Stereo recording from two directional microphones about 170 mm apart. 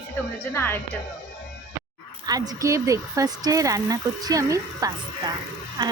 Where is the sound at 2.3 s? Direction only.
20° right (ahead or behind).